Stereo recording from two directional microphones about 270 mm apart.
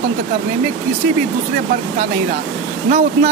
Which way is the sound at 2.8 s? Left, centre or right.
Right.